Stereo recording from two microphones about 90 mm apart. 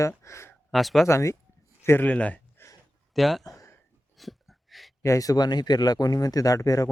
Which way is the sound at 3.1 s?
Centre (ahead or behind).